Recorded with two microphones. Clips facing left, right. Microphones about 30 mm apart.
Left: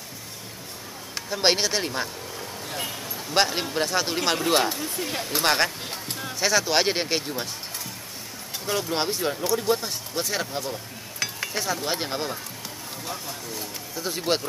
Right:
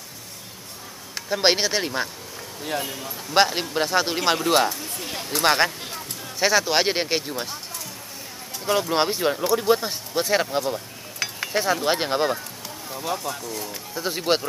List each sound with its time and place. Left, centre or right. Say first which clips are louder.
1.3 s speech: right 2 dB; centre
3.3 s speech: right 3 dB; centre
4.4 s speech: right 2 dB; centre
5.4 s speech: right 4 dB; centre
8.6 s speech: right 5 dB; centre
10.6 s a sound: right 5 dB; centre
11.6 s speech: right 6 dB; right